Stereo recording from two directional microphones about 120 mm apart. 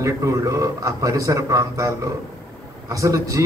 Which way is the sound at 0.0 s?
25° right (ahead or behind).